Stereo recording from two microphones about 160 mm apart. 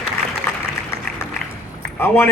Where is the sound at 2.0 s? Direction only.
15° left (ahead or behind).